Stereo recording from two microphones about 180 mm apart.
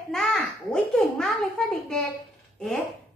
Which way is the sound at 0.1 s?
5° left (ahead or behind).